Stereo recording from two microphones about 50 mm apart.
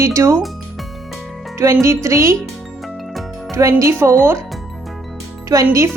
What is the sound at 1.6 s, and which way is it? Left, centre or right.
Speech, right.